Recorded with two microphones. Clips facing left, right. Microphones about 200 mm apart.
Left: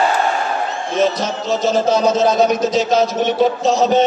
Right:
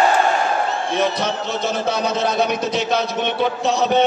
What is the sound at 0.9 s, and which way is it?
Speech, 60° right (ahead or behind).